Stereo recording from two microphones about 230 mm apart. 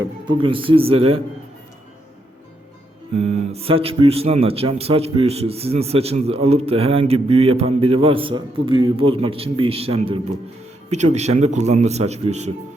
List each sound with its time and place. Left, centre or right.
0.0 s speech: right
3.2 s speech: right